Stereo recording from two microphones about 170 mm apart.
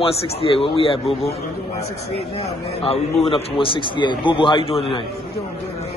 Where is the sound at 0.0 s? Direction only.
35° left (ahead or behind).